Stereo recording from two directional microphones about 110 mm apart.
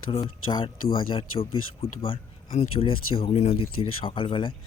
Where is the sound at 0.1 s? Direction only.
50° left (ahead or behind).